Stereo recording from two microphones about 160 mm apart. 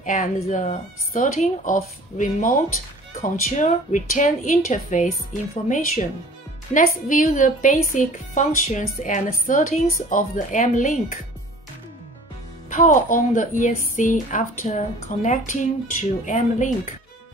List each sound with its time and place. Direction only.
0.0 s speech: 55° left (ahead or behind)
12.6 s speech: 50° left (ahead or behind)